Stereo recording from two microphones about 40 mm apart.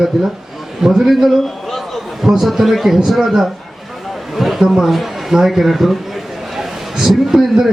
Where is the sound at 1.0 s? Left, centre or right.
Centre.